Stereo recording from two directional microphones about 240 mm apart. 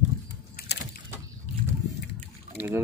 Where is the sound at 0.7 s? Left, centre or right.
Left.